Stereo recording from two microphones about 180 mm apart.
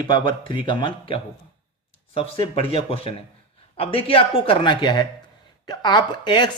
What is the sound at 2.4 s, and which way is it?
Speech, 30° left (ahead or behind).